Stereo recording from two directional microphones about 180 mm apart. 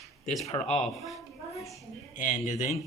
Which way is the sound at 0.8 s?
Centre (ahead or behind).